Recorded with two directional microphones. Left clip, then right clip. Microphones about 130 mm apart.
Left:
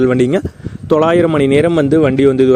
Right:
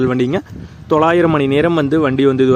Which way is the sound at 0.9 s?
35° left (ahead or behind).